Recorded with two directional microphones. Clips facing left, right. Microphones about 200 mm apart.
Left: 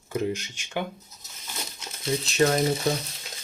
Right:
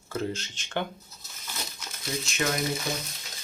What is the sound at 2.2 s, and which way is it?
Speech, 35° left (ahead or behind).